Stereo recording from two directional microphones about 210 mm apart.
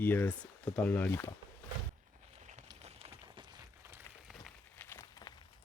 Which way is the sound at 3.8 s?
10° right (ahead or behind).